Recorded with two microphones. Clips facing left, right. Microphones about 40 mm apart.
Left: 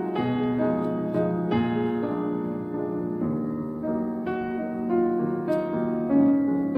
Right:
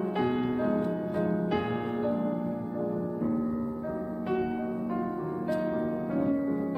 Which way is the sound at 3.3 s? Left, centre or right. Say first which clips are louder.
Left 2 dB; centre.